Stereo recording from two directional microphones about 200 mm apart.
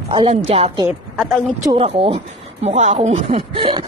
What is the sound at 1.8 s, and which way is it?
Speech, 30° right (ahead or behind).